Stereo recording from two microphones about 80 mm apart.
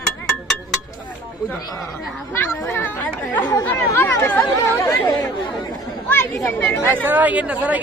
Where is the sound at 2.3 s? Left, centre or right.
Left.